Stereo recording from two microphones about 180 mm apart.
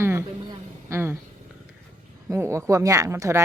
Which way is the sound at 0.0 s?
15° right (ahead or behind).